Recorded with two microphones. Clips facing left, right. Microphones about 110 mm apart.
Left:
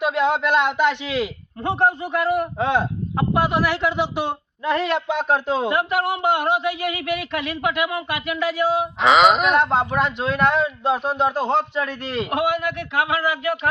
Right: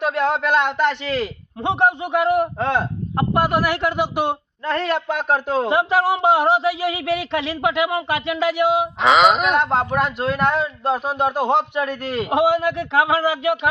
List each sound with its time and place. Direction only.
0.0 s speech: centre (ahead or behind)
1.6 s speech: 20° right (ahead or behind)
2.6 s speech: centre (ahead or behind)
4.6 s speech: 5° left (ahead or behind)
5.7 s speech: 30° right (ahead or behind)
9.0 s speech: centre (ahead or behind)
12.3 s speech: 30° right (ahead or behind)